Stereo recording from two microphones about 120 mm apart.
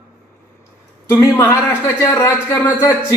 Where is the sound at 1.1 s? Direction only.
25° left (ahead or behind).